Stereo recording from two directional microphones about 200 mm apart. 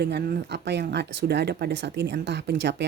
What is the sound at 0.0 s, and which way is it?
Speech, 55° right (ahead or behind).